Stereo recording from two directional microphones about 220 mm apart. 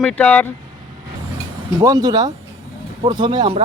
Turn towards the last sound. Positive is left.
turn(degrees=-25)  # may be behind; listen again after turning